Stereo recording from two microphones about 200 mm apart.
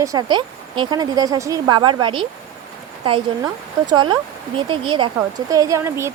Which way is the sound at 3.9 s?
20° right (ahead or behind).